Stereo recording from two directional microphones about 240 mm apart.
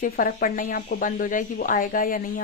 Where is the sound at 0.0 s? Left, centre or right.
Left.